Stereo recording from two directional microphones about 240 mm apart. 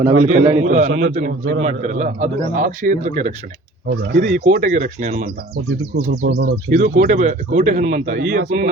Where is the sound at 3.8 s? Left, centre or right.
Right.